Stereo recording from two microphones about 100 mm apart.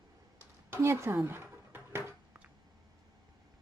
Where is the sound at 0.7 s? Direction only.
25° right (ahead or behind).